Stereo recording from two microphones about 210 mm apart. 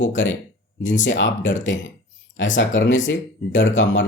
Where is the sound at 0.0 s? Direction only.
65° left (ahead or behind).